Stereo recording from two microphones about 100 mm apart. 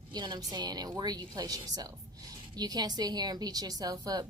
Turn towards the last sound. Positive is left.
turn(degrees=-40)  # may be behind; listen again after turning